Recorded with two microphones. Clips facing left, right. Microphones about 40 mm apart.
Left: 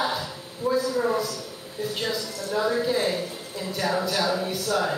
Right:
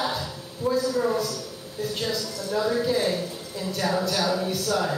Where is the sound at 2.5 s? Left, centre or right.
Centre.